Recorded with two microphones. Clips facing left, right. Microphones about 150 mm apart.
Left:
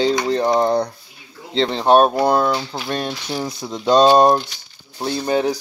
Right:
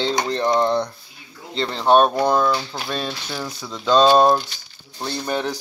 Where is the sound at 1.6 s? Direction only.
15° left (ahead or behind).